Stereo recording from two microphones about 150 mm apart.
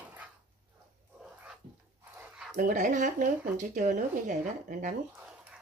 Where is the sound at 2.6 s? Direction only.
65° right (ahead or behind).